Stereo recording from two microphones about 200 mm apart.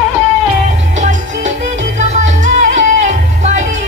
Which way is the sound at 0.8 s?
40° right (ahead or behind).